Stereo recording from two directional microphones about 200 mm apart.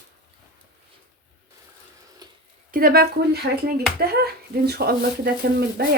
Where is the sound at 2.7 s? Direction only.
50° right (ahead or behind).